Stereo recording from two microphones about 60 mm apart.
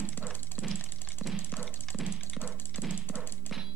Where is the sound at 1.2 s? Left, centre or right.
Left.